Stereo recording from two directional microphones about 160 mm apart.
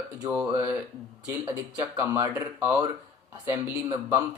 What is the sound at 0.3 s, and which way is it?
Speech, 15° right (ahead or behind).